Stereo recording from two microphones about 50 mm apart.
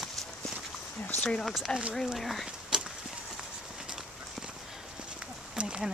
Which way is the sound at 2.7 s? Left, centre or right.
Centre.